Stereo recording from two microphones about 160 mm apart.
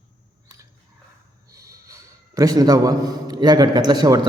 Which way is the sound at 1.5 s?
20° right (ahead or behind).